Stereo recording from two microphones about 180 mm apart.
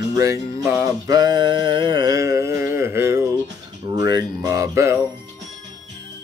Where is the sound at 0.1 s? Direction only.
20° right (ahead or behind).